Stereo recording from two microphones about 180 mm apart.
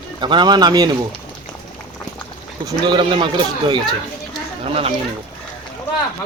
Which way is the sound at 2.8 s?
25° right (ahead or behind).